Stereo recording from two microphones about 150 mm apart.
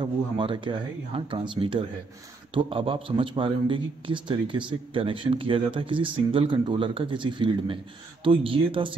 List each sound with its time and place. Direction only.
0.0 s a man's voice: 35° right (ahead or behind)